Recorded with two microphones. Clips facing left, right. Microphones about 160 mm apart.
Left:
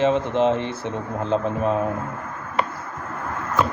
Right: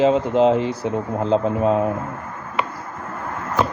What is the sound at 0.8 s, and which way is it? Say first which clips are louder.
Speech: right 5 dB; 35° right (ahead or behind).